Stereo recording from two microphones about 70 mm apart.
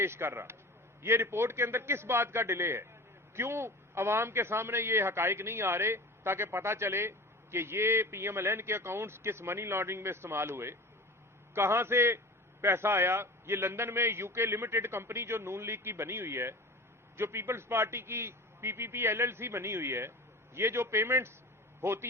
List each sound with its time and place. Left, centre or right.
0.0 s a man's voice: right